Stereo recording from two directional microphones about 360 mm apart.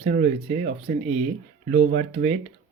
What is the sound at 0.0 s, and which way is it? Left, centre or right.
Speech, right.